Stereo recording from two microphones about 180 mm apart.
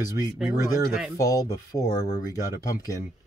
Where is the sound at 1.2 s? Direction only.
20° left (ahead or behind).